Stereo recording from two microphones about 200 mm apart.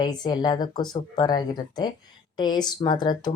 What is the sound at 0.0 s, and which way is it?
Speech, 20° left (ahead or behind).